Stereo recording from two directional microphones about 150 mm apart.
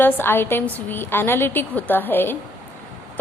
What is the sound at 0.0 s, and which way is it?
A woman's voice, 15° left (ahead or behind).